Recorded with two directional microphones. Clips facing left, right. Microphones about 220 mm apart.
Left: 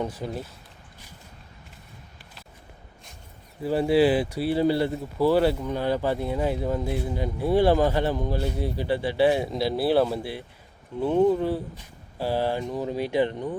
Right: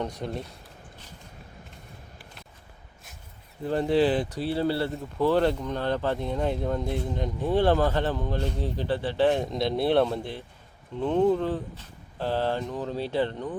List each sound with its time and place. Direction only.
0.0 s speech: 5° left (ahead or behind)
3.6 s speech: 5° left (ahead or behind)